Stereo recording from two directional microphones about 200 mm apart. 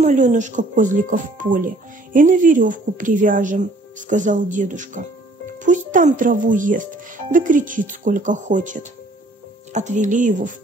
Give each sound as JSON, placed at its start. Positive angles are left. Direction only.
{"t": 0.0, "sound": "speech", "side_deg": -40}